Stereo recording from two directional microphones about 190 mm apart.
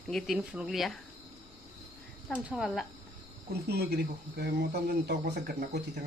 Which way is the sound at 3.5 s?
60° right (ahead or behind).